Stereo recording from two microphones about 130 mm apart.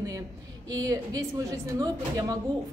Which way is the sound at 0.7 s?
30° right (ahead or behind).